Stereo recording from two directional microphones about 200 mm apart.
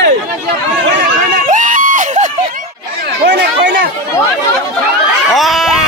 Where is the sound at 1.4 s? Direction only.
40° right (ahead or behind).